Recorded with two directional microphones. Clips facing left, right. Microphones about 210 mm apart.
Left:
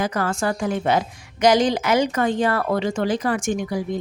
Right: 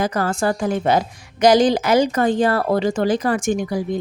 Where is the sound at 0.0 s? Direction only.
35° right (ahead or behind).